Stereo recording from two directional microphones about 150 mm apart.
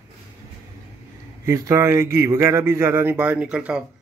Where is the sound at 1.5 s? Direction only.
20° right (ahead or behind).